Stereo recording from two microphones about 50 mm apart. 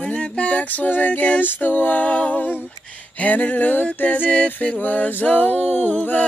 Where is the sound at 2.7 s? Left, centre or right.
Left.